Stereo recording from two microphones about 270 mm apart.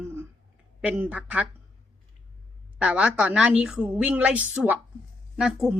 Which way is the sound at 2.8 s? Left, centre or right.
Centre.